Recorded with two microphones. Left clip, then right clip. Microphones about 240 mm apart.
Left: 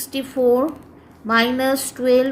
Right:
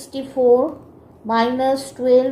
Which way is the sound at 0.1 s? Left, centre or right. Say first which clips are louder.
Right 2 dB; left.